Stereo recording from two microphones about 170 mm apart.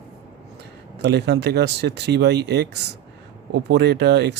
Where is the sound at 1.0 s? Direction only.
85° right.